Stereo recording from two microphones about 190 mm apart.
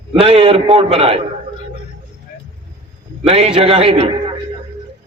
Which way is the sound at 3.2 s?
30° right (ahead or behind).